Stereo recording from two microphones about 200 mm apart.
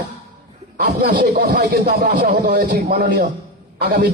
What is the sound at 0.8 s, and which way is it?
Speech, 50° right (ahead or behind).